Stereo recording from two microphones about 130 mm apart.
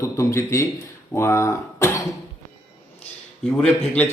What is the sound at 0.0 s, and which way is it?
Speech, 25° left (ahead or behind).